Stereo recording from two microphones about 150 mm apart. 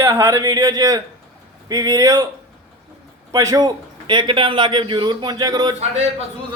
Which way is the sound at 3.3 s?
20° right (ahead or behind).